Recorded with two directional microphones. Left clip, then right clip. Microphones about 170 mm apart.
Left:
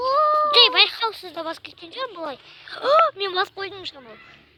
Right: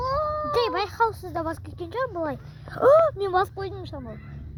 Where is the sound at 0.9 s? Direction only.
Centre (ahead or behind).